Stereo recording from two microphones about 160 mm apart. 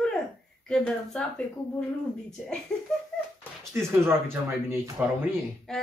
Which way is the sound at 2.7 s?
5° left (ahead or behind).